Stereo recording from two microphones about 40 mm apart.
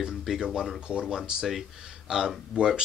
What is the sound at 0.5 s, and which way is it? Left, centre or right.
Speech, centre.